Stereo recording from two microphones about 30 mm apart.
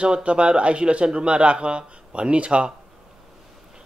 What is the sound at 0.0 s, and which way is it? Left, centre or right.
Speech, right.